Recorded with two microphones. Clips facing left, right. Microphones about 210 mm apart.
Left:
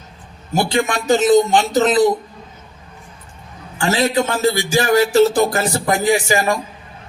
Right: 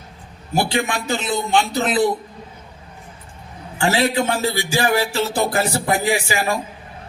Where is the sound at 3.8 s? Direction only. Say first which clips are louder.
Left 1 dB; 40° left (ahead or behind).